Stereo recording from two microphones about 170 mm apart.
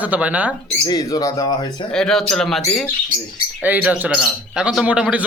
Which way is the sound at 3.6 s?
10° right (ahead or behind).